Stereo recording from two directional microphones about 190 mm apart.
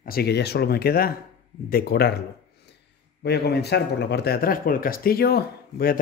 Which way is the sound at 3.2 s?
60° left (ahead or behind).